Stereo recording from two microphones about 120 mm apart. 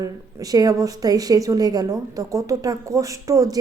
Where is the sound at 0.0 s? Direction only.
30° right (ahead or behind).